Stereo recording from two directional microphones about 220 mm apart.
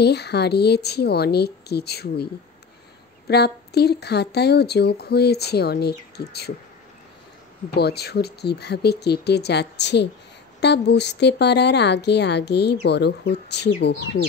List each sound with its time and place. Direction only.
0.0 s a woman's voice: 50° left (ahead or behind)
3.3 s a woman's voice: 50° left (ahead or behind)
7.7 s a woman's voice: 45° left (ahead or behind)